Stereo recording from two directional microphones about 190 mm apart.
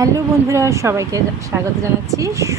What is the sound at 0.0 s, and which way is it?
Speech, 15° right (ahead or behind).